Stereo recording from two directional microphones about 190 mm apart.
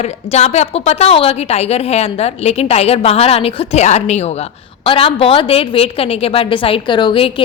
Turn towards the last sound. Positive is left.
turn(degrees=25)  # may be behind; listen again after turning